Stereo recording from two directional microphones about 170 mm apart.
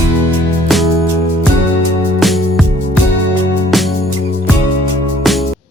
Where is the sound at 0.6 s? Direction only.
Centre (ahead or behind).